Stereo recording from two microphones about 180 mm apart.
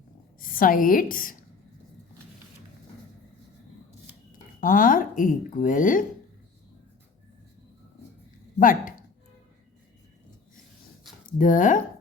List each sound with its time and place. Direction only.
0.3 s a woman's voice: 50° left (ahead or behind)
4.6 s speech: 50° left (ahead or behind)
8.5 s speech: 50° left (ahead or behind)
11.3 s speech: 45° left (ahead or behind)